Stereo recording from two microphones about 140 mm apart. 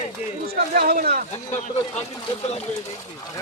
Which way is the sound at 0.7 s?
90° right.